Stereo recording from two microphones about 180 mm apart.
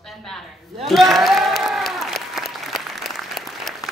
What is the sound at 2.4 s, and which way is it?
Applause, centre (ahead or behind).